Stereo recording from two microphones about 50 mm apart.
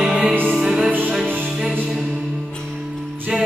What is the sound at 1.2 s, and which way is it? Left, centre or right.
Music, right.